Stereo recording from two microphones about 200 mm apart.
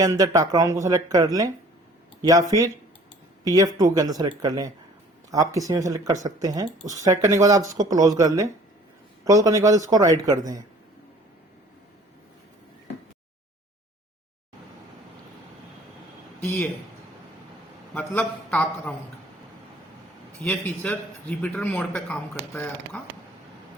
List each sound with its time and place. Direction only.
0.0 s speech: 20° right (ahead or behind)
3.4 s speech: 20° right (ahead or behind)
16.4 s a man's voice: 10° left (ahead or behind)
17.9 s a man's voice: 10° left (ahead or behind)
20.4 s a man's voice: 5° left (ahead or behind)